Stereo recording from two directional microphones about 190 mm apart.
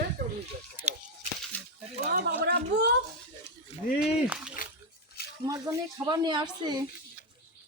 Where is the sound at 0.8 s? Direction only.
10° right (ahead or behind).